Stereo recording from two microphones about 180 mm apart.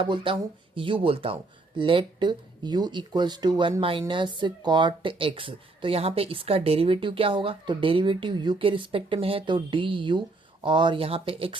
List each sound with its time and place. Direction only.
0.0 s speech: 30° right (ahead or behind)